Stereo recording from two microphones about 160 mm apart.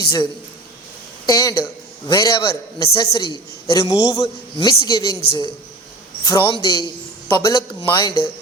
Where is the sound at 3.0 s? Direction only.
25° left (ahead or behind).